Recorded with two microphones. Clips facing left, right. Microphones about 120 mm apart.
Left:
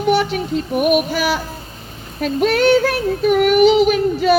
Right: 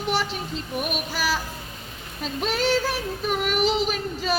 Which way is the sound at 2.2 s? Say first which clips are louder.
Left 10 dB; 70° left (ahead or behind).